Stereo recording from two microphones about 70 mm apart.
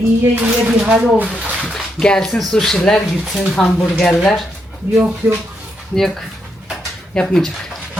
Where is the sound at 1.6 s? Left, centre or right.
Centre.